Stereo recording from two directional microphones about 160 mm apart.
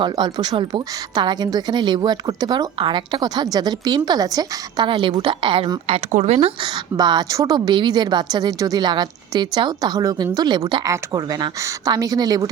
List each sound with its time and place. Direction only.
0.0 s a woman's voice: 25° right (ahead or behind)
6.1 s speech: 45° right (ahead or behind)
6.6 s a woman's voice: 25° right (ahead or behind)